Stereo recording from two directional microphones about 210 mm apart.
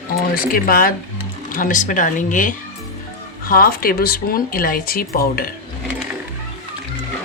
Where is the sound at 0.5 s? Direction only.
45° left (ahead or behind).